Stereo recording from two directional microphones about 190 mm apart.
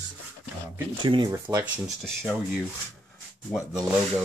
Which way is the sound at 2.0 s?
Centre (ahead or behind).